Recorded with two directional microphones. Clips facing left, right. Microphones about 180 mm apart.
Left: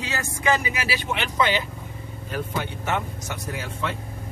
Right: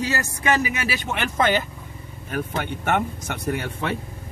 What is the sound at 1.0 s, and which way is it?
Speech, 50° right (ahead or behind).